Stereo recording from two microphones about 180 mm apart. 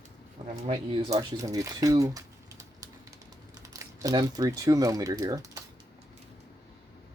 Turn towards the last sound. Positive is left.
turn(degrees=-20)  # may be behind; listen again after turning